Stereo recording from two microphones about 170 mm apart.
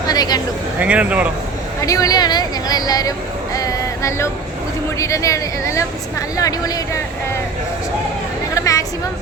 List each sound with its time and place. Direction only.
0.1 s a sound: 25° left (ahead or behind)
0.8 s speech: 10° right (ahead or behind)
1.8 s a woman's voice: 20° left (ahead or behind)
8.5 s chatter: 20° left (ahead or behind)